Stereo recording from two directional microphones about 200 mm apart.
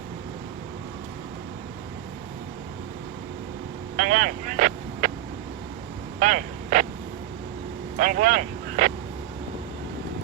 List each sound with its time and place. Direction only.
3.9 s speech: 40° right (ahead or behind)
6.1 s vehicle: 40° right (ahead or behind)
7.9 s vehicle: 40° right (ahead or behind)